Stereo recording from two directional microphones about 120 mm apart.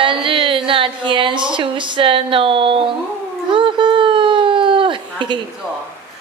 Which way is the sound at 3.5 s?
45° right (ahead or behind).